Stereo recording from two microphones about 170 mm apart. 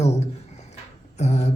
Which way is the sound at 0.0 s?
40° left (ahead or behind).